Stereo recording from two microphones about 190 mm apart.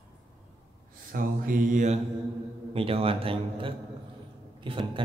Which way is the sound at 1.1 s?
45° right (ahead or behind).